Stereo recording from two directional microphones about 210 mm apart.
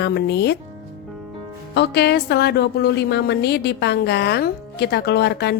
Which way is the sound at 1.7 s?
50° left (ahead or behind).